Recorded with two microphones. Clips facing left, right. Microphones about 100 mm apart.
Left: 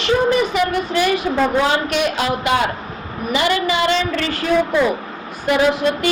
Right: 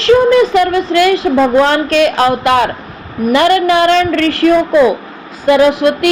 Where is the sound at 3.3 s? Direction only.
60° right (ahead or behind).